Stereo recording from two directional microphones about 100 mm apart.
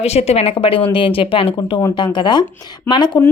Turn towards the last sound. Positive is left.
turn(degrees=50)  # may be behind; listen again after turning